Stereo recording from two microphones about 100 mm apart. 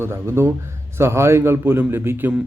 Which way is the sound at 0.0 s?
25° right (ahead or behind).